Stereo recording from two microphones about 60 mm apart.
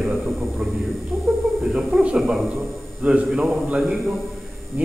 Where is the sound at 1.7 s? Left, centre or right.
Centre.